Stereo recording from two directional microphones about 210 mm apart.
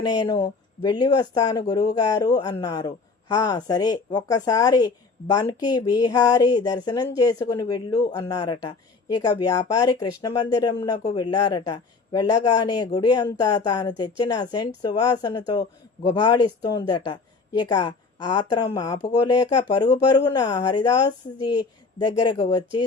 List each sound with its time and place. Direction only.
0.0 s speech: 20° left (ahead or behind)